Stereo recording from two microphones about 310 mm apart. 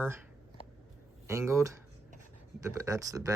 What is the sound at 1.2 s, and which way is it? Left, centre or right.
Speech, centre.